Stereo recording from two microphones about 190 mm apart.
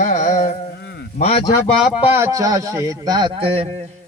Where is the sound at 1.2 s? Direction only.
30° left (ahead or behind).